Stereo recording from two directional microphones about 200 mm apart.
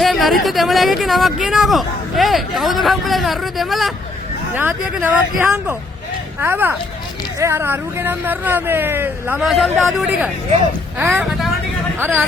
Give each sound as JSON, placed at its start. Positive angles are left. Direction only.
{"t": 0.0, "sound": "speech", "side_deg": 0}